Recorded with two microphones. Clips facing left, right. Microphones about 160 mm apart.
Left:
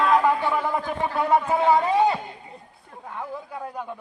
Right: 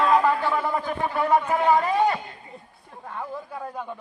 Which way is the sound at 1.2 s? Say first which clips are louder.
Left 1 dB; 25° left (ahead or behind).